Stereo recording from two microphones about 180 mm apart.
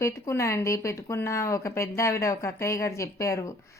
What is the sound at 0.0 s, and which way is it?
Speech, 15° left (ahead or behind).